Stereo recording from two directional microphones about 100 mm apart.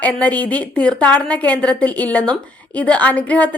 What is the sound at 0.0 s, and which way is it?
A woman's voice, 15° left (ahead or behind).